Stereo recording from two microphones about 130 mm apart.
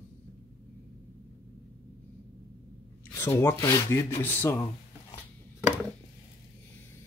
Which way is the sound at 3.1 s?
20° left (ahead or behind).